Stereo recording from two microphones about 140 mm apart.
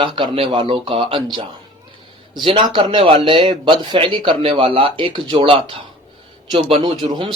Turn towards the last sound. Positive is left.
turn(degrees=-40)  # may be behind; listen again after turning